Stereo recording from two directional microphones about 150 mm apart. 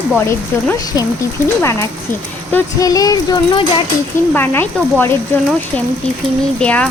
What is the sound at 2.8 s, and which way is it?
A child's voice, 25° left (ahead or behind).